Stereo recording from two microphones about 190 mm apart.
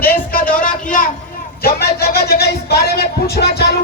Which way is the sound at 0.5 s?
45° left (ahead or behind).